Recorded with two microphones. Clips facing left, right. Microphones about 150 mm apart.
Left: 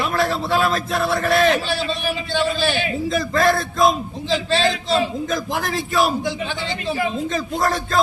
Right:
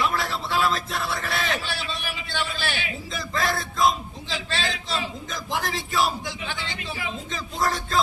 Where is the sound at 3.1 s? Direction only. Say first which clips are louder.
Left 8 dB; 50° left (ahead or behind).